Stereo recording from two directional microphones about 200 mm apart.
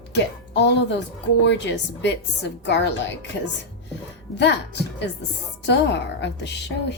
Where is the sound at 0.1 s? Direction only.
60° left (ahead or behind).